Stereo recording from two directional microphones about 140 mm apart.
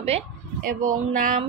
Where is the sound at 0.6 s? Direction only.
70° right (ahead or behind).